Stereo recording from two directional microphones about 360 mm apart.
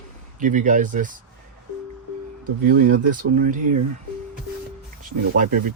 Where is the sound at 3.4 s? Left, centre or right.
Right.